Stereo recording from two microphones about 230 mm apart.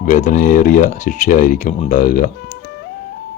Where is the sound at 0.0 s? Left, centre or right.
Left.